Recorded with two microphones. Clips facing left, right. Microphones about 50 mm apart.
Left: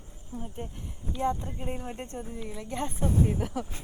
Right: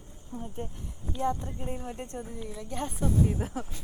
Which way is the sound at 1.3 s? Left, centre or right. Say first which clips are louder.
Left 1 dB; left.